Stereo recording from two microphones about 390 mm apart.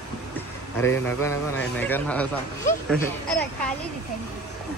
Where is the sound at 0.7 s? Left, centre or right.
Centre.